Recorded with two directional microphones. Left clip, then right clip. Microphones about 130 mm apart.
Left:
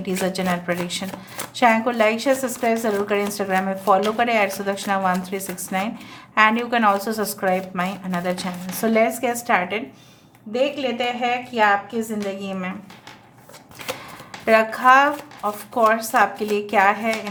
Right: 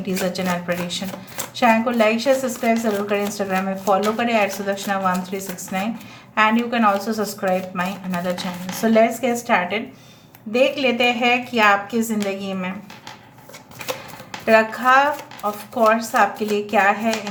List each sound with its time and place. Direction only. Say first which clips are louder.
0.0 s speech: even; 30° left (ahead or behind)
10.5 s a woman's voice: right 4 dB; centre (ahead or behind)
12.4 s speech: right 1 dB; 15° left (ahead or behind)
14.4 s speech: even; 35° left (ahead or behind)